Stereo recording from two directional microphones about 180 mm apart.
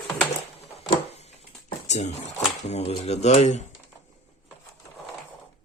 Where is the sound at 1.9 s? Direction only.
40° left (ahead or behind).